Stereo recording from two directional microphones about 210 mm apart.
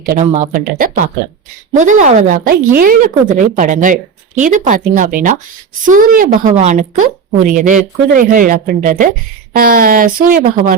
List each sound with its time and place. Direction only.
0.0 s a woman's voice: 35° right (ahead or behind)